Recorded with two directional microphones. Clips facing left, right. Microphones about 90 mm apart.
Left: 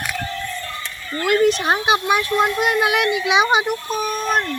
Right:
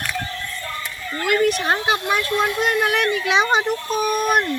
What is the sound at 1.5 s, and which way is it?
Speech, 20° left (ahead or behind).